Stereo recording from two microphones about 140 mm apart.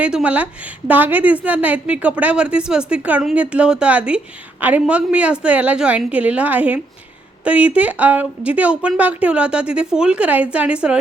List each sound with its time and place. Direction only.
0.0 s a woman's voice: 10° right (ahead or behind)